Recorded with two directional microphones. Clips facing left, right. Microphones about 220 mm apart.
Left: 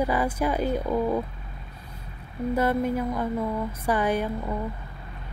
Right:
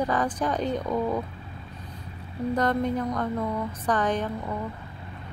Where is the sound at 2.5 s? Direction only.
5° left (ahead or behind).